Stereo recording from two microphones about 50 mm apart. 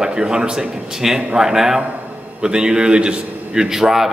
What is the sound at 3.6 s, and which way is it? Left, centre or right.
Speech, centre.